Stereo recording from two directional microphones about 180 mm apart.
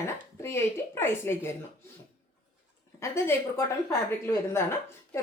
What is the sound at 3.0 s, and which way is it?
A woman's voice, 15° left (ahead or behind).